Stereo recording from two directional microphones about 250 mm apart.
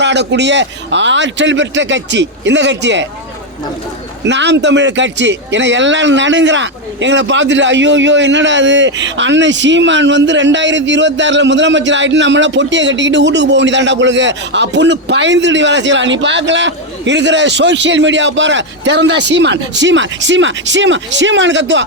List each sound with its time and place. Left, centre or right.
0.0 s speech: right
4.3 s speech: right